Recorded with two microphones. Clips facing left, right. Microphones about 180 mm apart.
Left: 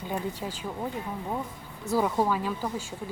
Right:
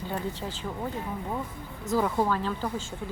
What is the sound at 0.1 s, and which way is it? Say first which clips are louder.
Speech: left 2 dB; 10° left (ahead or behind).